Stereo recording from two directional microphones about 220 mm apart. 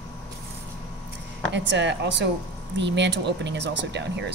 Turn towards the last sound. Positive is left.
turn(degrees=-50)  # may be behind; listen again after turning